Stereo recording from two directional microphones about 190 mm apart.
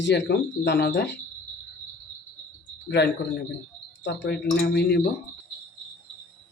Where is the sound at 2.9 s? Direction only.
65° left (ahead or behind).